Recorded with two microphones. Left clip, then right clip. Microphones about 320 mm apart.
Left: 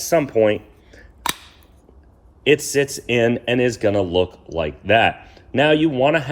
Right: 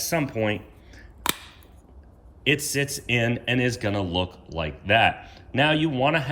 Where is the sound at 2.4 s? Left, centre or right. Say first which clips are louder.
Left 7 dB; centre.